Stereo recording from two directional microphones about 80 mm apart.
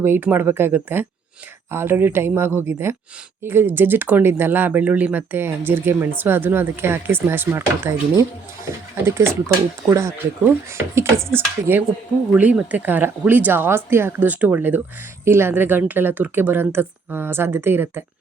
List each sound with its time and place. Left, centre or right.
0.0 s speech: right